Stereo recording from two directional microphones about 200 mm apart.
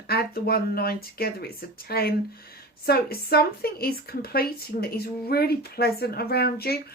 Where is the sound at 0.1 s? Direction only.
50° left (ahead or behind).